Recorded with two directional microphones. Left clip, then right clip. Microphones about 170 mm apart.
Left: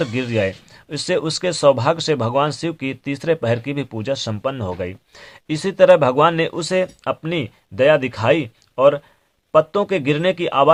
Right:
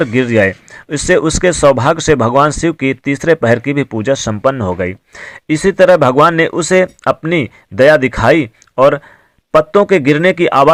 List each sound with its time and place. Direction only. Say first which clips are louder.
0.0 s speech: right 9 dB; 30° right (ahead or behind)